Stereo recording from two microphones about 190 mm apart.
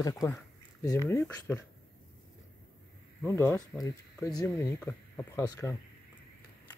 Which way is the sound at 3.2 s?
15° left (ahead or behind).